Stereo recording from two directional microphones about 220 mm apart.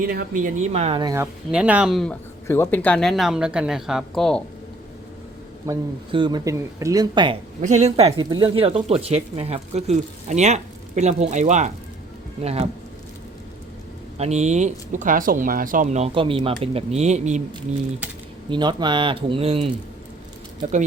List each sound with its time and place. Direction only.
0.0 s speech: 40° right (ahead or behind); by 4.4 s centre (ahead or behind)
5.6 s speech: 20° right (ahead or behind)
7.6 s speech: 30° right (ahead or behind)
14.2 s speech: 30° right (ahead or behind)
18.5 s speech: 20° right (ahead or behind)